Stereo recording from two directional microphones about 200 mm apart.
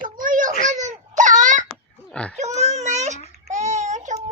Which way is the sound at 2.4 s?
35° right (ahead or behind).